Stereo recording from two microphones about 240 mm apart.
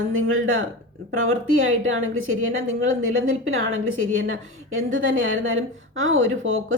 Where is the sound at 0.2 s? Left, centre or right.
Right.